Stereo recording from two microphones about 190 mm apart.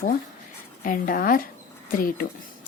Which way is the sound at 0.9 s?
45° left (ahead or behind).